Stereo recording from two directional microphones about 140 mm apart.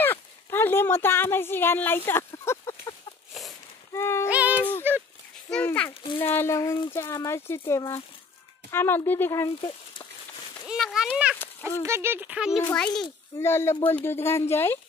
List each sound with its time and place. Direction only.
0.0 s speech: 15° left (ahead or behind)
3.9 s music: 20° left (ahead or behind)
4.3 s a sound: 10° right (ahead or behind)
4.9 s speech: 15° right (ahead or behind)
5.5 s speech: 10° left (ahead or behind)
10.8 s speech: 5° left (ahead or behind)
11.8 s speech: 20° right (ahead or behind)
12.7 s speech: 5° left (ahead or behind)
13.4 s speech: 20° left (ahead or behind)